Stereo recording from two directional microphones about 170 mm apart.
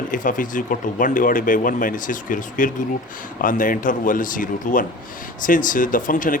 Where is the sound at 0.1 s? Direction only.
50° left (ahead or behind).